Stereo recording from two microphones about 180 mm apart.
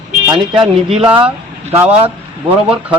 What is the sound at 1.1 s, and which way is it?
Speech, 10° right (ahead or behind).